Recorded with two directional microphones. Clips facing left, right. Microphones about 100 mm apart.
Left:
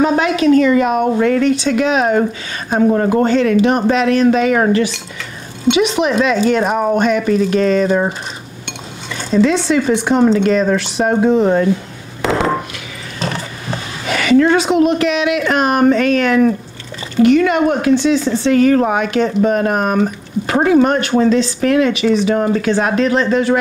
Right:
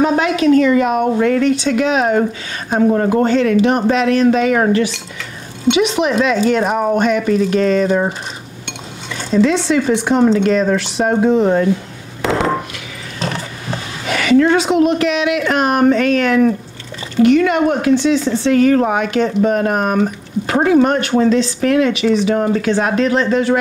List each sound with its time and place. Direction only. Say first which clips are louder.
0.0 s speech: left 1 dB; 20° left (ahead or behind)
8.6 s dishes: even; 25° left (ahead or behind)
9.6 s speech: even; 15° left (ahead or behind)
9.9 s speech: even; 25° left (ahead or behind)
11.1 s a sound: even; 30° left (ahead or behind)
13.2 s speech: left 1 dB; 25° left (ahead or behind)